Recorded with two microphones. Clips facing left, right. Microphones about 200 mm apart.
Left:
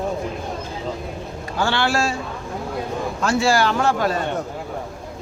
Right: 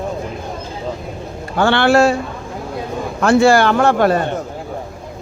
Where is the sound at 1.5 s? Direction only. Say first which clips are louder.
Right 8 dB; 60° right (ahead or behind).